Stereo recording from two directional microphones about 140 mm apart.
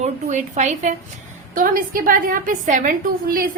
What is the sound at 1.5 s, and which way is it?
A woman's voice, 85° right.